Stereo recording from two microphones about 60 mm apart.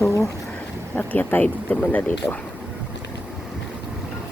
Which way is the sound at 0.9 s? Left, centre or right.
Left.